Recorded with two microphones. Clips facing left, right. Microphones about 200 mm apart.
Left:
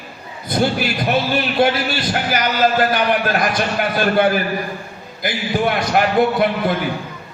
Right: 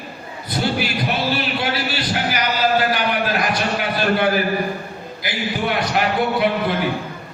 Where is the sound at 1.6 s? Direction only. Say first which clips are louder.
Left 8 dB; 45° left (ahead or behind).